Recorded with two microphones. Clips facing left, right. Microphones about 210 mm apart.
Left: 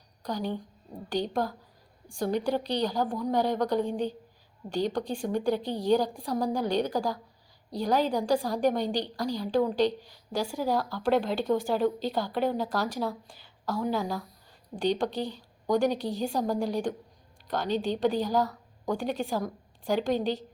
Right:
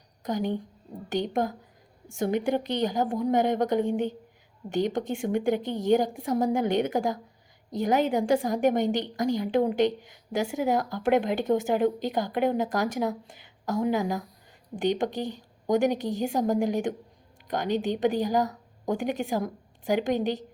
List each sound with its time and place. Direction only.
0.2 s a woman's voice: 20° right (ahead or behind)